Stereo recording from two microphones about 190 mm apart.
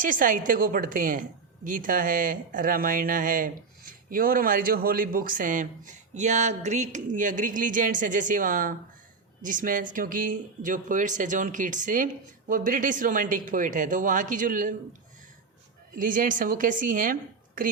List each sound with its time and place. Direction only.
0.0 s a woman's voice: 45° right (ahead or behind)
16.0 s a woman's voice: 45° right (ahead or behind)